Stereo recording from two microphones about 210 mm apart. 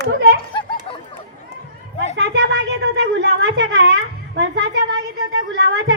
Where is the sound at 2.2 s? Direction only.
55° right (ahead or behind).